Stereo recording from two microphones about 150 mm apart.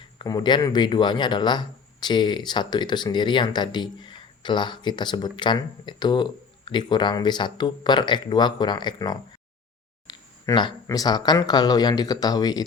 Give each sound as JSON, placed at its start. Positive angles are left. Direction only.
{"t": 0.2, "sound": "speech", "side_deg": 30}
{"t": 10.1, "sound": "a sound", "side_deg": 30}
{"t": 10.8, "sound": "speech", "side_deg": 25}